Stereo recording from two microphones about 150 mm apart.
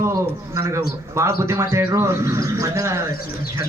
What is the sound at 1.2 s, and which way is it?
A man's voice, 20° right (ahead or behind).